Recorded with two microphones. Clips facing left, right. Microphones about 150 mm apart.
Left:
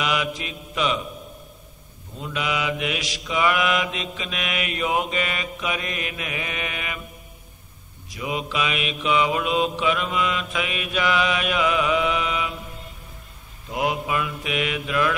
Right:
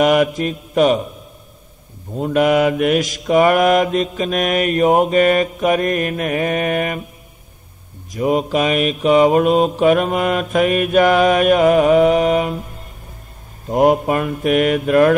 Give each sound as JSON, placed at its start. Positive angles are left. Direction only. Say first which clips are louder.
{"t": 0.0, "sound": "mantra", "louder": "right 12 dB", "side_deg": -50}
{"t": 2.1, "sound": "mantra", "louder": "right 13 dB", "side_deg": -50}
{"t": 8.1, "sound": "mantra", "louder": "right 11 dB", "side_deg": -45}
{"t": 13.7, "sound": "mantra", "louder": "right 11 dB", "side_deg": -45}